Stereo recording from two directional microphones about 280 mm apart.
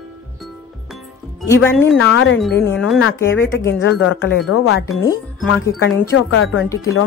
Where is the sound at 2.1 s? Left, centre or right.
Left.